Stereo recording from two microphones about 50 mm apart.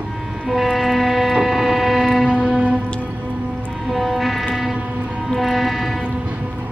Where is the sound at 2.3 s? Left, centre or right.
Right.